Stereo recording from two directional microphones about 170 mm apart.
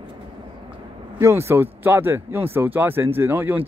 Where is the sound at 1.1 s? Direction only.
15° right (ahead or behind).